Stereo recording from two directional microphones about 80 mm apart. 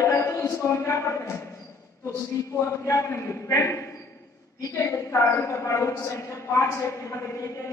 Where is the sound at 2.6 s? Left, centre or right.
Left.